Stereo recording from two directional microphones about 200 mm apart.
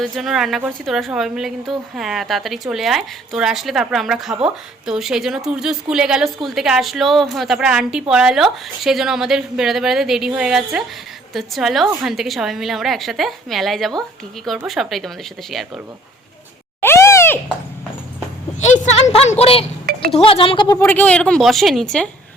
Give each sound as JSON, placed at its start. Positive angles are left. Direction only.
{"t": 0.0, "sound": "a woman's voice", "side_deg": 0}
{"t": 16.8, "sound": "a sound", "side_deg": 15}
{"t": 18.6, "sound": "a woman's voice", "side_deg": 35}
{"t": 19.8, "sound": "chink", "side_deg": -45}
{"t": 20.1, "sound": "speech", "side_deg": 30}
{"t": 20.7, "sound": "a woman's voice", "side_deg": 10}